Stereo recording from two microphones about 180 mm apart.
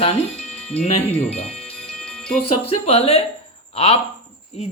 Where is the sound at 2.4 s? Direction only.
35° left (ahead or behind).